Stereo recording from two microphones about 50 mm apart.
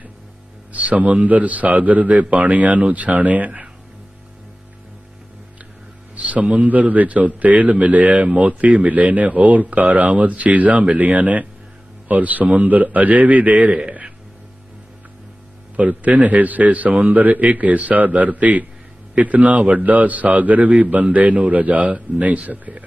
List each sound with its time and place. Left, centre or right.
0.7 s a man's voice: right
6.1 s a man's voice: right
13.7 s a sound: right
15.7 s a man's voice: right